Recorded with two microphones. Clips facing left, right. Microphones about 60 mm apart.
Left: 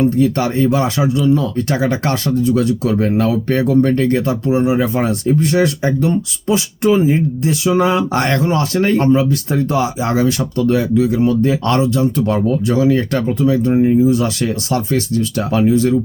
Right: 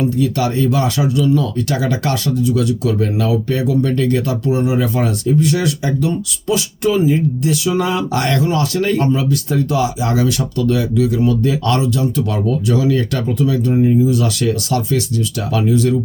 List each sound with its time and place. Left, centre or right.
0.0 s speech: left